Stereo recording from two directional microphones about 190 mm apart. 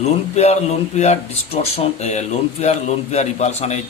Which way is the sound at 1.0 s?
35° left (ahead or behind).